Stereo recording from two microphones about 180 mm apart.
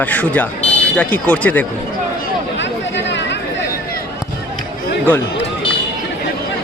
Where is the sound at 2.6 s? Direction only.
80° left.